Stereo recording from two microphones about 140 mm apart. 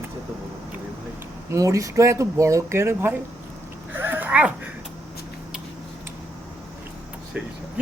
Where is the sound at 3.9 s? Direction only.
15° right (ahead or behind).